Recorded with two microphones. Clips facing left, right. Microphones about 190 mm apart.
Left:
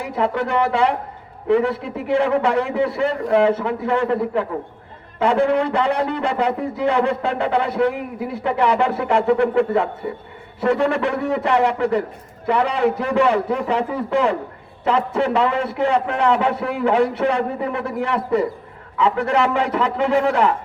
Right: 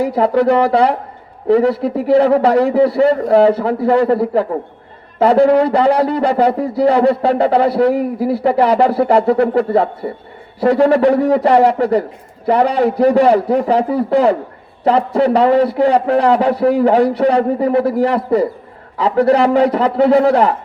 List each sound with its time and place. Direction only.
0.0 s speech: 35° right (ahead or behind)